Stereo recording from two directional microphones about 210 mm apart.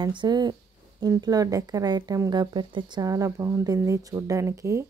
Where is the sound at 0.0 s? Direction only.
20° right (ahead or behind).